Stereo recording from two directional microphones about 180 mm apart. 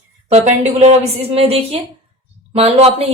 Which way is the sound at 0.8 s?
35° right (ahead or behind).